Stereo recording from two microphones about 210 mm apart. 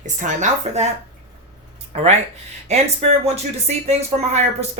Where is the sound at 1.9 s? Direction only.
30° right (ahead or behind).